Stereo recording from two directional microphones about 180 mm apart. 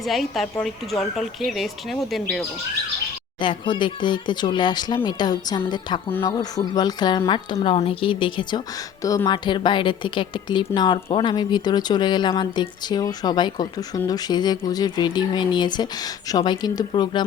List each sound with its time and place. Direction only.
0.0 s speech: centre (ahead or behind)
3.4 s speech: 25° left (ahead or behind)